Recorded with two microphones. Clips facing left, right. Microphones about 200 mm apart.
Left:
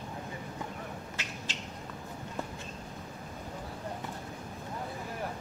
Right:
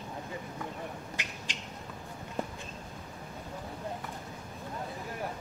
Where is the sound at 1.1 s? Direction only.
15° right (ahead or behind).